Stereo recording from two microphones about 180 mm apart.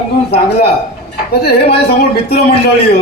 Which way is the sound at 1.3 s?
65° left (ahead or behind).